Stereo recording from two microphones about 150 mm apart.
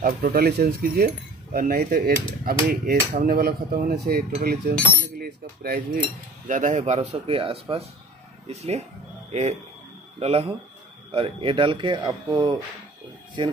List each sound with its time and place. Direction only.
0.0 s speech: 85° right
2.4 s dishes: 85° right
5.2 s speech: 90° right; by 6.8 s 55° right (ahead or behind)
6.8 s speech: 45° right (ahead or behind); by 12.5 s 30° right (ahead or behind)